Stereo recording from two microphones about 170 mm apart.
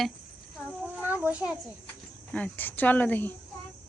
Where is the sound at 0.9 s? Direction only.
10° right (ahead or behind).